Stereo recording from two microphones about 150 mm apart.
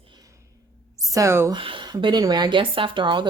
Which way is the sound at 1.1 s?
20° right (ahead or behind).